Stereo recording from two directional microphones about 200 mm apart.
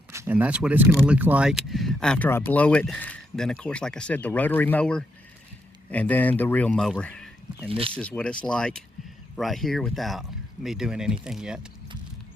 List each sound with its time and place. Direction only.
0.1 s a man's voice: 10° right (ahead or behind); by 7.3 s 5° left (ahead or behind)
7.7 s speech: 30° right (ahead or behind)
7.9 s speech: 5° left (ahead or behind)